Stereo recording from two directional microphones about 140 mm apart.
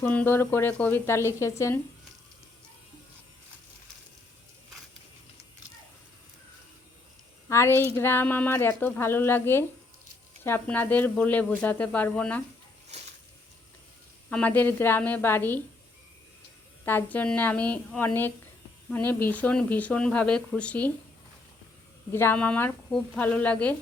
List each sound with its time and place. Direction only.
0.0 s a woman's voice: 15° left (ahead or behind)
7.4 s a woman's voice: 20° left (ahead or behind)
14.3 s a woman's voice: 10° left (ahead or behind)
16.8 s a woman's voice: 15° left (ahead or behind)
22.1 s a woman's voice: 15° left (ahead or behind)